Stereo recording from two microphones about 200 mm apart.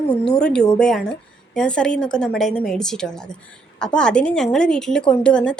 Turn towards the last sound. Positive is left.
turn(degrees=5)  # may be behind; listen again after turning